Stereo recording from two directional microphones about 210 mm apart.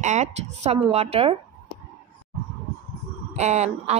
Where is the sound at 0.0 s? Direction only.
35° right (ahead or behind).